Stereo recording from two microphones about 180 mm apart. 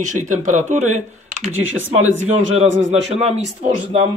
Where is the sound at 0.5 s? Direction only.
40° right (ahead or behind).